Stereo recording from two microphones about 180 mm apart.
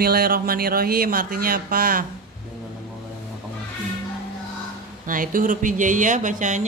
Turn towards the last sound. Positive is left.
turn(degrees=-45)  # may be behind; listen again after turning